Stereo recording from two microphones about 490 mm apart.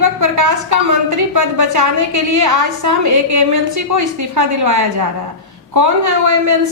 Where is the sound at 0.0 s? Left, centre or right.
Right.